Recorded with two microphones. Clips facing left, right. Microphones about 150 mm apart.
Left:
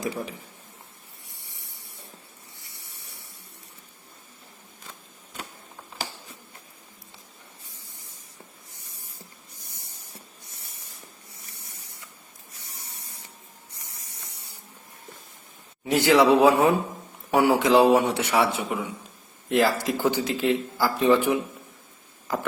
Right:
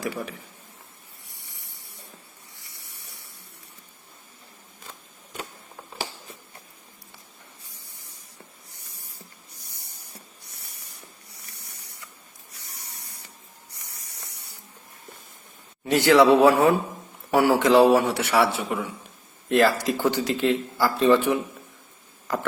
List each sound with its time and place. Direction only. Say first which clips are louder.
0.0 s a man's voice: even; 20° left (ahead or behind)
1.7 s spray: left 1 dB; centre (ahead or behind)
11.5 s printer: even; 70° right (ahead or behind)
13.7 s spray: even; 70° right (ahead or behind)
15.8 s a man's voice: right 2 dB; 10° left (ahead or behind)